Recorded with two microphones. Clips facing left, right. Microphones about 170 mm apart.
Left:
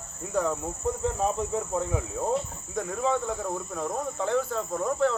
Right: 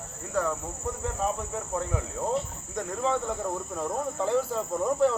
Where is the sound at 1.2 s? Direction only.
15° left (ahead or behind).